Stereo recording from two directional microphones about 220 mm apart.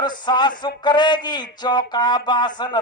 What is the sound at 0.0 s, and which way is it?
Speech, 20° left (ahead or behind).